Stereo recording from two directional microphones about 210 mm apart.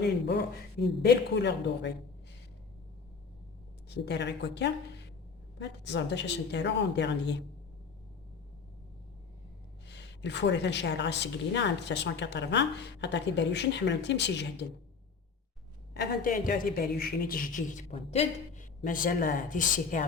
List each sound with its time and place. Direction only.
0.0 s speech: 55° left (ahead or behind)
3.8 s a woman's voice: 50° left (ahead or behind)
9.8 s a woman's voice: 55° left (ahead or behind)
16.0 s a woman's voice: 45° left (ahead or behind)